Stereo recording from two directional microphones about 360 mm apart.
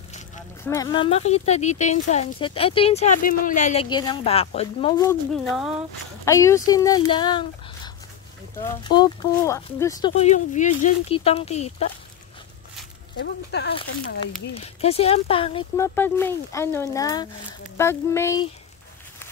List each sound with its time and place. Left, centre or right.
0.7 s speech: centre
13.2 s speech: left
14.5 s speech: centre